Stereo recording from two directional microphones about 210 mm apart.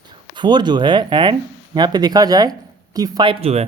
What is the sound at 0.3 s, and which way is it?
Speech, 20° right (ahead or behind).